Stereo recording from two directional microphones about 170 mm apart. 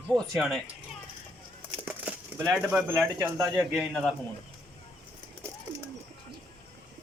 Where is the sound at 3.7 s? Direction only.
Centre (ahead or behind).